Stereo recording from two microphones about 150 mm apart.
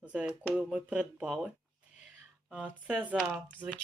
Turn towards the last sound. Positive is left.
turn(degrees=10)  # may be behind; listen again after turning